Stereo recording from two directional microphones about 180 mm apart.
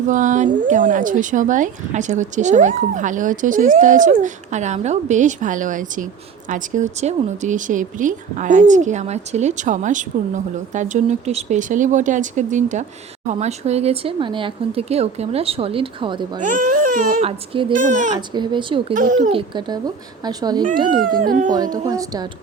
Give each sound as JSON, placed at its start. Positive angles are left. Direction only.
{"t": 0.1, "sound": "speech", "side_deg": -45}
{"t": 16.4, "sound": "speech", "side_deg": -45}
{"t": 17.7, "sound": "speech", "side_deg": -45}
{"t": 18.3, "sound": "speech", "side_deg": -25}
{"t": 18.9, "sound": "speech", "side_deg": -45}
{"t": 19.3, "sound": "speech", "side_deg": -25}
{"t": 21.2, "sound": "speech", "side_deg": -50}
{"t": 21.5, "sound": "speech", "side_deg": -20}